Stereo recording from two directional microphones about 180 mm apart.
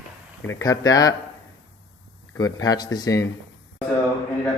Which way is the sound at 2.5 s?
20° left (ahead or behind).